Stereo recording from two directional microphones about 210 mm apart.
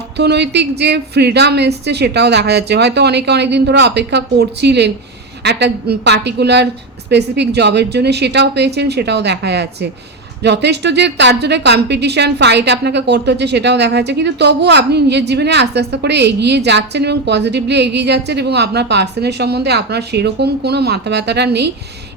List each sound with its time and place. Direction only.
0.2 s a woman's voice: 55° right (ahead or behind)